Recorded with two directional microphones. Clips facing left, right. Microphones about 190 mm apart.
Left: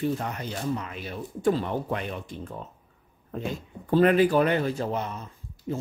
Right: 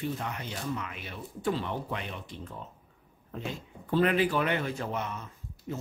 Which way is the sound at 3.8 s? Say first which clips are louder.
Left 6 dB; 45° left (ahead or behind).